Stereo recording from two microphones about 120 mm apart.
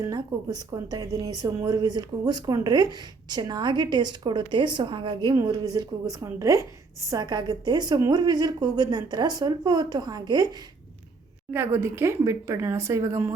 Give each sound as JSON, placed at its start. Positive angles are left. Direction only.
{"t": 0.0, "sound": "a woman's voice", "side_deg": -30}
{"t": 5.3, "sound": "a woman's voice", "side_deg": -30}
{"t": 11.5, "sound": "speech", "side_deg": -20}